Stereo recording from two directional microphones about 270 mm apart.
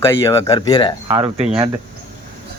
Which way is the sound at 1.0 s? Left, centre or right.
Centre.